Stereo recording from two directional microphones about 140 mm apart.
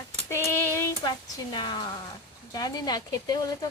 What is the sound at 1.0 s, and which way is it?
Speech, 35° left (ahead or behind).